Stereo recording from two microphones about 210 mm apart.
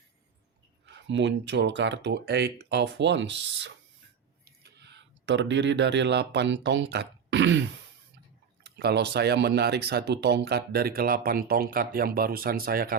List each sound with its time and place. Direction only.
1.0 s speech: 55° right (ahead or behind)